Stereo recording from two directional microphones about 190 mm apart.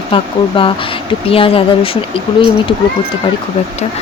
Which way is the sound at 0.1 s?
30° left (ahead or behind).